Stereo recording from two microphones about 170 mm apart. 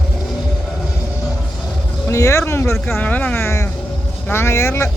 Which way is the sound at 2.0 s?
15° left (ahead or behind).